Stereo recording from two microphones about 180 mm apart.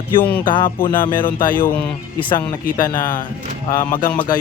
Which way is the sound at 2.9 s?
50° left (ahead or behind).